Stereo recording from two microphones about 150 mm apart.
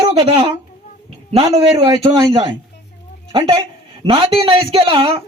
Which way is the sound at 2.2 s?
30° right (ahead or behind).